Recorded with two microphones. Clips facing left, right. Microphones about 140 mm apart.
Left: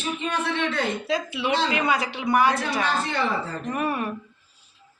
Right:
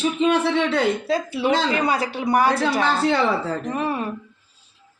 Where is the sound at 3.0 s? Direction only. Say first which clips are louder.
Right 6 dB; 80° right.